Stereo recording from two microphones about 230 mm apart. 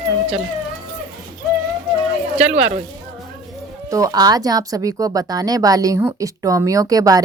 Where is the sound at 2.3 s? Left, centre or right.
Right.